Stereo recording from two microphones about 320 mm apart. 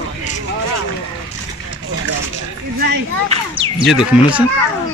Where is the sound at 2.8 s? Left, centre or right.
Centre.